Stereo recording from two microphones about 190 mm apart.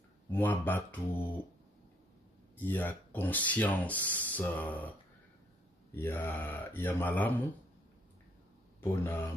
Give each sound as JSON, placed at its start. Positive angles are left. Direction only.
{"t": 0.3, "sound": "speech", "side_deg": 10}
{"t": 2.6, "sound": "speech", "side_deg": 10}
{"t": 5.9, "sound": "speech", "side_deg": 10}
{"t": 8.8, "sound": "speech", "side_deg": 10}